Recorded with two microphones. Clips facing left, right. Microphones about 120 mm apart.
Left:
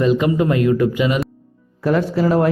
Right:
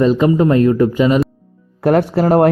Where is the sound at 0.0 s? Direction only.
35° right (ahead or behind).